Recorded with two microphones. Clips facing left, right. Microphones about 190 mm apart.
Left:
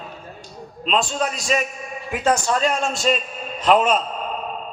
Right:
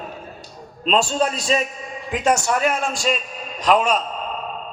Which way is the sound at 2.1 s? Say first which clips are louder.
Right 1 dB; 15° right (ahead or behind).